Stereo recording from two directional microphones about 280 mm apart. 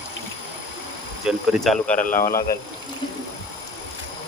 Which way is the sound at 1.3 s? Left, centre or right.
Centre.